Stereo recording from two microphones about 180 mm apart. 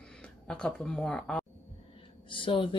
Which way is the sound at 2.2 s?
30° left (ahead or behind).